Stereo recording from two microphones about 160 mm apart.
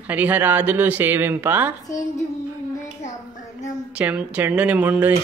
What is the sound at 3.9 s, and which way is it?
Speech, 10° right (ahead or behind).